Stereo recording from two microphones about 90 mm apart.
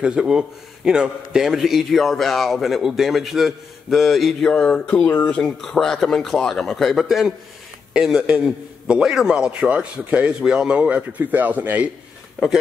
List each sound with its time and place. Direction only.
0.0 s a man's voice: 10° right (ahead or behind)